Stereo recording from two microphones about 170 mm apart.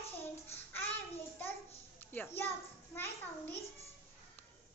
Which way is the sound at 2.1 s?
10° left (ahead or behind).